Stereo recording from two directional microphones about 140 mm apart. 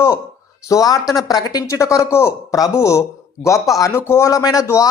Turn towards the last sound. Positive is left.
turn(degrees=25)  # may be behind; listen again after turning